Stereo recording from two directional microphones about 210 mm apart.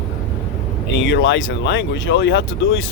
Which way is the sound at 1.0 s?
60° left (ahead or behind).